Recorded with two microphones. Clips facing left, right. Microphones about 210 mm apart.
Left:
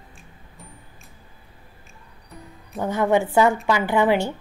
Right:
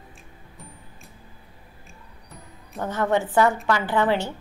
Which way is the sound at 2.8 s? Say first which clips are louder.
Left 3 dB; 10° left (ahead or behind).